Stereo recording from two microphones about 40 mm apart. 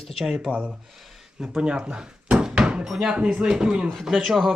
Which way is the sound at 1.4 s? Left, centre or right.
Right.